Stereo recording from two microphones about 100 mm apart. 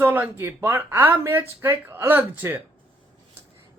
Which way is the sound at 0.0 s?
20° right (ahead or behind).